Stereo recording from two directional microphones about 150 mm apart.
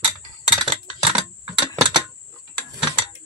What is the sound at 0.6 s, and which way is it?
Computer keyboard, 35° right (ahead or behind).